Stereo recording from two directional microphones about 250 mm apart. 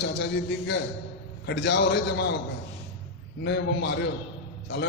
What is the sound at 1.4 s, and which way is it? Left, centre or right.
Speech, left.